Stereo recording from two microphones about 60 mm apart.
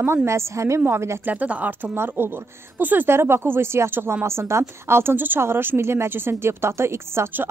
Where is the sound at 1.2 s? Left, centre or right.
Right.